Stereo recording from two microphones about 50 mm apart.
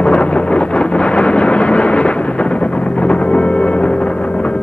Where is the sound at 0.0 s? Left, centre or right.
Left.